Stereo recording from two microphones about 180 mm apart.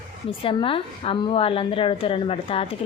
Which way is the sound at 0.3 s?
30° left (ahead or behind).